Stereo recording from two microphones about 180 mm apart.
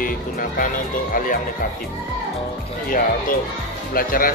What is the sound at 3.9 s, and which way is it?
Speech, 55° left (ahead or behind).